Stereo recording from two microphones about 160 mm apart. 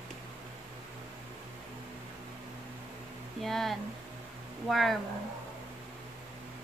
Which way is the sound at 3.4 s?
Centre (ahead or behind).